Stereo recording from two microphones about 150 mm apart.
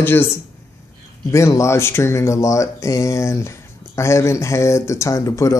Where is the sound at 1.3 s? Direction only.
20° left (ahead or behind).